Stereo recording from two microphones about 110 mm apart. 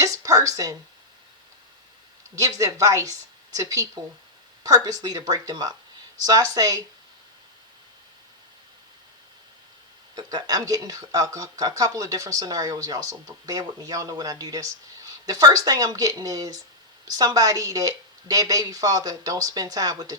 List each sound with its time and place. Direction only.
0.0 s a sound: 30° right (ahead or behind)
2.3 s speech: 30° right (ahead or behind)
10.2 s speech: 35° right (ahead or behind)